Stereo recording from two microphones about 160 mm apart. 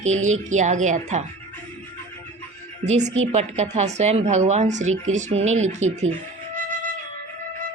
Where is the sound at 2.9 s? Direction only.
45° right (ahead or behind).